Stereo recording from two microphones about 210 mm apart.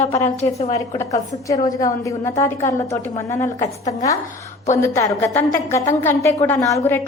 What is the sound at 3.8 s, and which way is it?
Speech, 30° left (ahead or behind).